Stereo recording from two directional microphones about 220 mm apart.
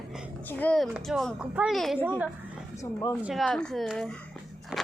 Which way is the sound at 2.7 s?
15° left (ahead or behind).